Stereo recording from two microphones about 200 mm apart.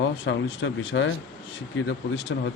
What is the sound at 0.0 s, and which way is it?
Speech, 65° left (ahead or behind).